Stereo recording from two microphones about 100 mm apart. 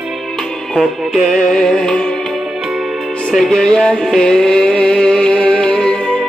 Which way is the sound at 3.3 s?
5° left (ahead or behind).